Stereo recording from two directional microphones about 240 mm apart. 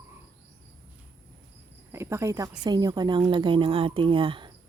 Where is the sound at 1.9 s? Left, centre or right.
Centre.